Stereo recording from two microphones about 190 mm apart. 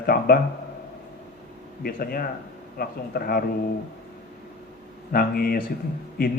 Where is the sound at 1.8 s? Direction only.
50° left (ahead or behind).